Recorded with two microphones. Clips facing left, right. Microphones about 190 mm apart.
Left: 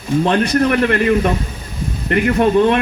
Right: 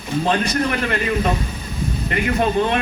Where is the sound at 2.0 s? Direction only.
55° left (ahead or behind).